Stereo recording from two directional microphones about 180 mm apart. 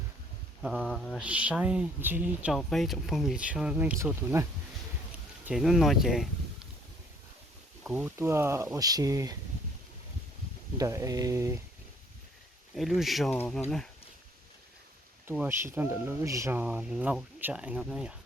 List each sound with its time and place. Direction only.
0.6 s speech: centre (ahead or behind)
1.2 s speech: 5° right (ahead or behind)
2.6 s speech: centre (ahead or behind); by 4.4 s 15° right (ahead or behind)
5.5 s speech: centre (ahead or behind)
7.9 s speech: 10° right (ahead or behind)
10.8 s speech: 15° right (ahead or behind)
12.7 s speech: centre (ahead or behind)
13.3 s speech: 10° left (ahead or behind)
15.3 s speech: 15° right (ahead or behind)